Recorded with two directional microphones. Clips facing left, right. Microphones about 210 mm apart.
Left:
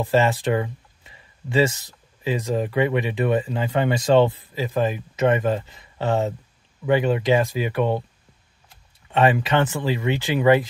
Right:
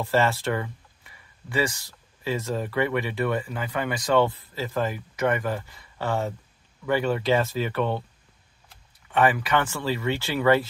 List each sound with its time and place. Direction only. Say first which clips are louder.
0.0 s speech: left 3 dB; 15° left (ahead or behind)
9.1 s speech: left 3 dB; 25° left (ahead or behind)